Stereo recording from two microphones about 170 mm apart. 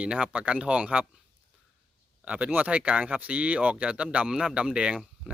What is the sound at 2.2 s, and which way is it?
Speech, 10° right (ahead or behind).